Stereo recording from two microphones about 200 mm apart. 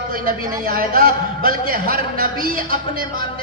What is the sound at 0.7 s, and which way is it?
A man's voice, 45° right (ahead or behind).